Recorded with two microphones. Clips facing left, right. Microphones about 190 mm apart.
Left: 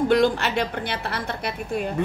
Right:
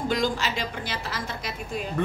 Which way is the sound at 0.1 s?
60° left (ahead or behind).